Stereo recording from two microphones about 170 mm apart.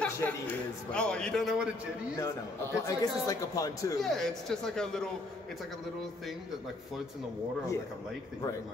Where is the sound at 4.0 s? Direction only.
Centre (ahead or behind).